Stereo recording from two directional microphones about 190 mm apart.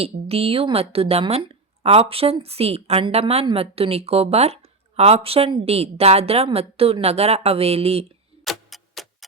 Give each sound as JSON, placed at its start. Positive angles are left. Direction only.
{"t": 0.0, "sound": "a woman's voice", "side_deg": -30}
{"t": 8.4, "sound": "clock", "side_deg": 0}